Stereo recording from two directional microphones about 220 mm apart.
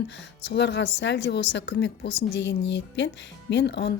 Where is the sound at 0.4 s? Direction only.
50° left (ahead or behind).